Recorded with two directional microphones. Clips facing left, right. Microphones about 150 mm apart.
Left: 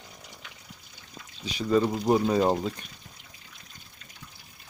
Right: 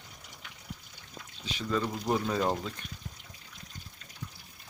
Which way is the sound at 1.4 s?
15° left (ahead or behind).